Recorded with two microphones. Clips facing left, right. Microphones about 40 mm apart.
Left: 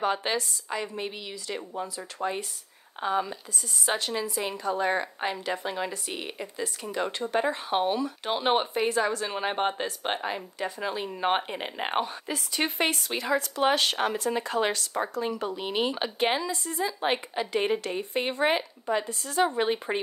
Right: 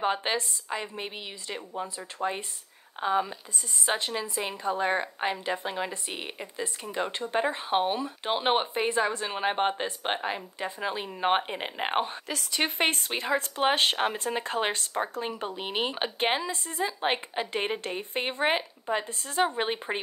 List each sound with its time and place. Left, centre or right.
0.0 s speech: centre
2.2 s speech: centre
3.0 s speech: centre
12.3 s a woman's voice: right
12.7 s speech: right; by 19.0 s centre
19.0 s speech: right
19.4 s speech: centre